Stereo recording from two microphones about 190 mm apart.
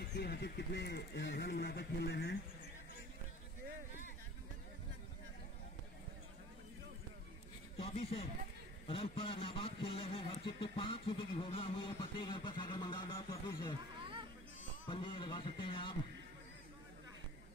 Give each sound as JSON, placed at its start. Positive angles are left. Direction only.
{"t": 0.0, "sound": "speech", "side_deg": 60}
{"t": 7.8, "sound": "speech", "side_deg": 30}
{"t": 14.9, "sound": "speech", "side_deg": 25}